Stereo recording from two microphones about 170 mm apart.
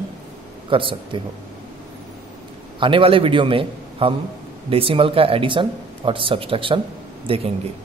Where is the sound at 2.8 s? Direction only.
30° right (ahead or behind).